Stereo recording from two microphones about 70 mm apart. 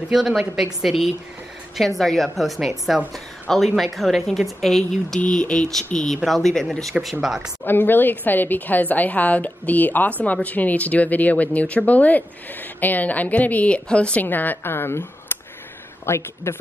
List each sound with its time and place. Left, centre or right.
0.1 s a woman's voice: centre
5.2 s a woman's voice: centre
7.6 s a woman's voice: left
14.2 s speech: left